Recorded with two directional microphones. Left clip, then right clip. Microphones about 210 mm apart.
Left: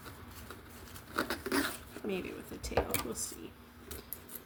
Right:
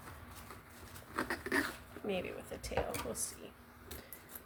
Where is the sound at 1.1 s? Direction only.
30° left (ahead or behind).